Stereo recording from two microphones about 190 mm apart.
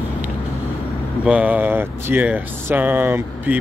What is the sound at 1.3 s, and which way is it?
Speech, 5° right (ahead or behind).